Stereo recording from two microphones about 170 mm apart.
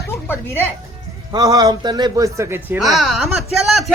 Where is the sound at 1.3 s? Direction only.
20° right (ahead or behind).